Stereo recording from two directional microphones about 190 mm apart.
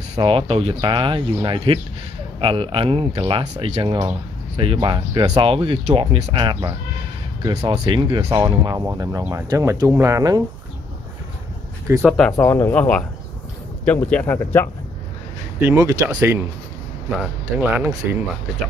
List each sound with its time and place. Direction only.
0.1 s speech: 25° right (ahead or behind)
12.0 s speech: centre (ahead or behind)
12.4 s speech: 15° left (ahead or behind)
15.6 s speech: 15° right (ahead or behind)